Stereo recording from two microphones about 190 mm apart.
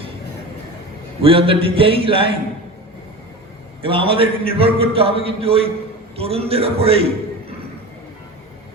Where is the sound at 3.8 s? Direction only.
30° right (ahead or behind).